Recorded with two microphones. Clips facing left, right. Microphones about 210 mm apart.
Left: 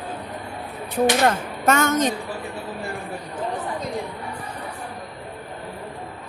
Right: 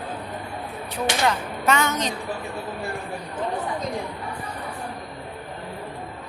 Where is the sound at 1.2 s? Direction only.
50° left (ahead or behind).